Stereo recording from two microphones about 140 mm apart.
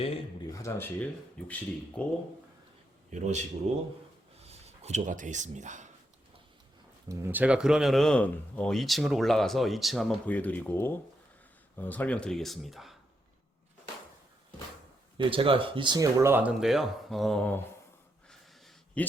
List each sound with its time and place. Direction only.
0.5 s speech: 20° left (ahead or behind)
3.1 s speech: 60° right (ahead or behind)
4.4 s a sound: 50° right (ahead or behind)
7.1 s speech: 15° right (ahead or behind); by 10.2 s centre (ahead or behind)
10.2 s speech: 10° left (ahead or behind)
15.2 s speech: 40° right (ahead or behind); by 17.6 s 10° left (ahead or behind)
18.3 s a sound: 5° left (ahead or behind)